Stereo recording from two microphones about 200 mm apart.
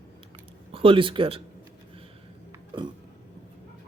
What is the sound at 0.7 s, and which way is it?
Speech, 25° right (ahead or behind).